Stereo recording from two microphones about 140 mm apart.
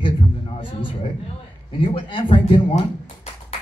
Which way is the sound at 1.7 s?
40° left (ahead or behind).